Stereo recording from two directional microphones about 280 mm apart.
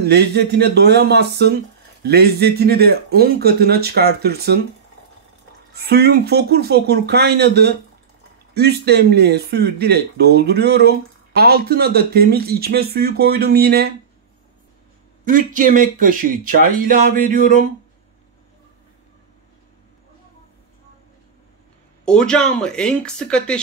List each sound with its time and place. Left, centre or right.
0.0 s speech: right
5.8 s speech: right
15.2 s speech: right
22.0 s speech: centre